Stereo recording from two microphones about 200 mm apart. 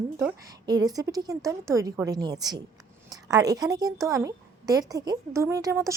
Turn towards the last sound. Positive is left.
turn(degrees=-15)  # may be behind; listen again after turning